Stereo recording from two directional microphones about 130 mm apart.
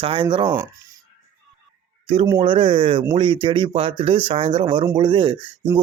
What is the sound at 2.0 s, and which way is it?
Speech, 45° right (ahead or behind).